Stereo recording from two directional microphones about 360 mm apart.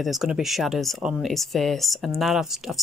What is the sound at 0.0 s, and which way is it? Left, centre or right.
Speech, centre.